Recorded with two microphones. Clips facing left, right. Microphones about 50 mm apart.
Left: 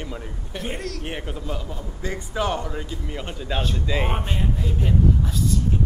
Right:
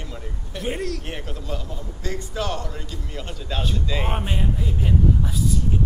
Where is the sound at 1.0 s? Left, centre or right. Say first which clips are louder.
Left 2 dB; centre.